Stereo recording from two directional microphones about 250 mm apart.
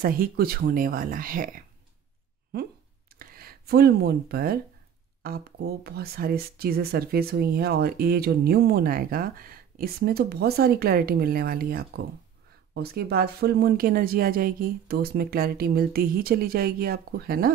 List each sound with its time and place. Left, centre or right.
0.0 s speech: right
3.2 s speech: right